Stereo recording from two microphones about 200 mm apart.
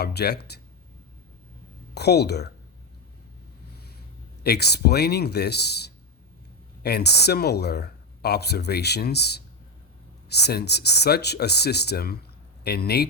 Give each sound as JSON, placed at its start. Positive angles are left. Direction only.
{"t": 0.0, "sound": "speech", "side_deg": 55}
{"t": 2.0, "sound": "speech", "side_deg": 55}
{"t": 4.4, "sound": "speech", "side_deg": 55}